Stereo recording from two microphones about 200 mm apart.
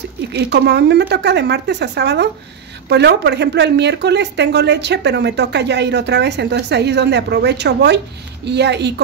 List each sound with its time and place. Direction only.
0.3 s speech: 55° right (ahead or behind)